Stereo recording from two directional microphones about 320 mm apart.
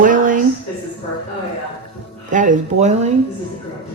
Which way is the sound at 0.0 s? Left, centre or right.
Right.